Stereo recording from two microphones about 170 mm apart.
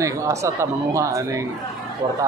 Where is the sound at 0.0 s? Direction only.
20° right (ahead or behind).